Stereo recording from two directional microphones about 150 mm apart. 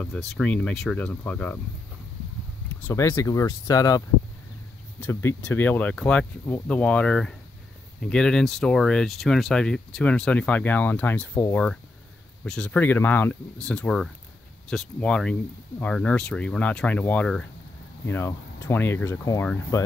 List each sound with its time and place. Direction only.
0.0 s speech: 5° left (ahead or behind)
2.9 s speech: 20° left (ahead or behind)
5.0 s speech: 15° left (ahead or behind)